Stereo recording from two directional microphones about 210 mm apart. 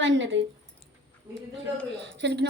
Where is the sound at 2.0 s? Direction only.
55° right (ahead or behind).